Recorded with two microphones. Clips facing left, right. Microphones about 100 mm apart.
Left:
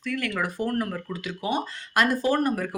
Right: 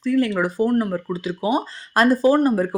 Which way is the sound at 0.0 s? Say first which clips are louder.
Right 9 dB; 30° right (ahead or behind).